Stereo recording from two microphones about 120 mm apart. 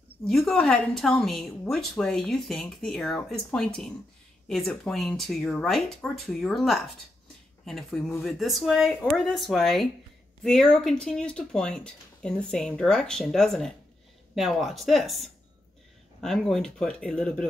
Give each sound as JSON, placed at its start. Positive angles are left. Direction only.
{"t": 0.3, "sound": "speech", "side_deg": 0}